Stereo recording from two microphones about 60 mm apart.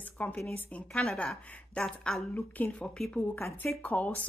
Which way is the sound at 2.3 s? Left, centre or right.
Left.